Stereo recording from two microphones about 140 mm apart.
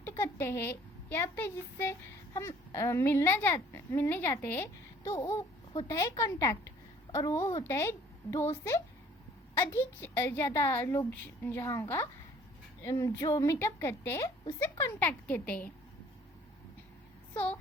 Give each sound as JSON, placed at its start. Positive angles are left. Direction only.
{"t": 0.0, "sound": "a woman's voice", "side_deg": 20}
{"t": 17.3, "sound": "a woman's voice", "side_deg": 10}